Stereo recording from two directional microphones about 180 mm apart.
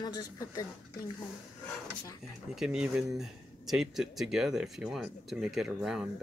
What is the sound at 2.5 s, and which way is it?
Speech, 5° right (ahead or behind).